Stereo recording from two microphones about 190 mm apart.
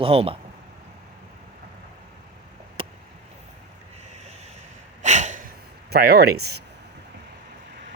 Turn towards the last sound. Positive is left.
turn(degrees=-60)  # may be behind; listen again after turning